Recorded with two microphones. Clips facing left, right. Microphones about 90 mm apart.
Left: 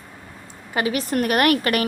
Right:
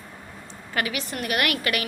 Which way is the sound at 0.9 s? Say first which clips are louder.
Left 7 dB; 45° left (ahead or behind).